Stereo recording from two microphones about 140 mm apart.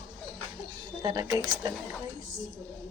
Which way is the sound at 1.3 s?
5° right (ahead or behind).